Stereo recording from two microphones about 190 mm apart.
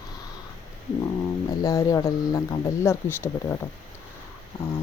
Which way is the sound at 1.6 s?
15° left (ahead or behind).